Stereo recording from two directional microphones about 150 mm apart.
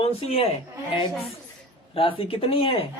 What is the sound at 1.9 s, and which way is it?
Speech, 40° left (ahead or behind).